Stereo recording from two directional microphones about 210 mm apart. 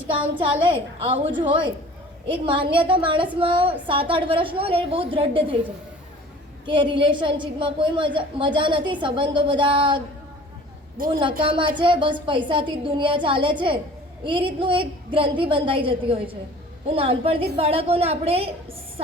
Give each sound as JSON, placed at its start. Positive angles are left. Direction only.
{"t": 0.1, "sound": "a woman's voice", "side_deg": -25}
{"t": 6.7, "sound": "a woman's voice", "side_deg": -20}
{"t": 10.9, "sound": "a woman's voice", "side_deg": -40}
{"t": 11.2, "sound": "a woman's voice", "side_deg": -25}